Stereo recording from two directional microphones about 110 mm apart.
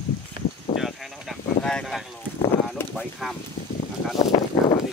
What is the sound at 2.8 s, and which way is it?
Speech, 20° left (ahead or behind).